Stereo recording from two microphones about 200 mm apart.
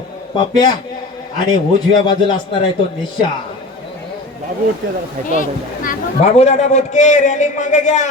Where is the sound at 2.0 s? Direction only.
25° left (ahead or behind).